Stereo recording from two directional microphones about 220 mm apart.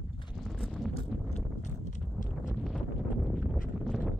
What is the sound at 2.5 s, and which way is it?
Wind noise, centre (ahead or behind).